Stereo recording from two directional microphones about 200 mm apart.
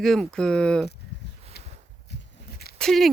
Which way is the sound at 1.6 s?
55° left (ahead or behind).